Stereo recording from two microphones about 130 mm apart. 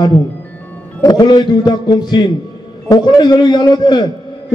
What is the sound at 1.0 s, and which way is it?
A man's voice, 35° left (ahead or behind).